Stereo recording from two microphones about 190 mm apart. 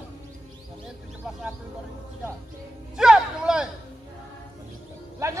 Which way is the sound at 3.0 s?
5° right (ahead or behind).